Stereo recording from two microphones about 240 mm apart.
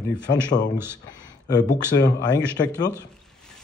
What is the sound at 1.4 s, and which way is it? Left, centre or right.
Speech, centre.